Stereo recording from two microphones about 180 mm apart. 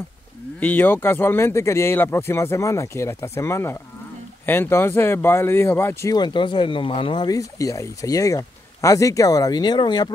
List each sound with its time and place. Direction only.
0.6 s speech: 10° left (ahead or behind)